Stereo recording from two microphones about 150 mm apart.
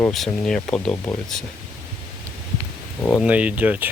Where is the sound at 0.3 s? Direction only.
5° left (ahead or behind).